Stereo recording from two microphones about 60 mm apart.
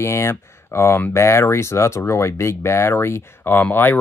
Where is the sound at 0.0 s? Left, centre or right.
Left.